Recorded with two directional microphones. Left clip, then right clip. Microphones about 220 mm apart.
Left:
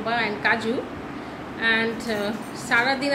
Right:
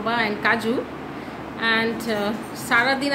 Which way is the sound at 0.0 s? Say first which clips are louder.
Right 2 dB; 15° right (ahead or behind).